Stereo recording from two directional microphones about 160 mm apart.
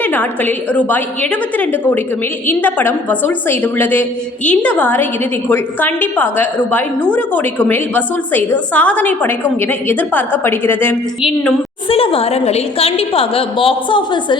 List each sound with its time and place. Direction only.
0.0 s a woman's voice: 10° left (ahead or behind)
11.9 s a woman's voice: 35° left (ahead or behind)